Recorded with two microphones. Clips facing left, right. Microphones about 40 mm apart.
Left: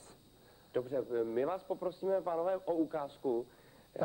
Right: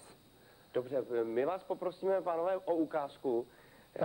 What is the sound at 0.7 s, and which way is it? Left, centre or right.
A man's voice, centre.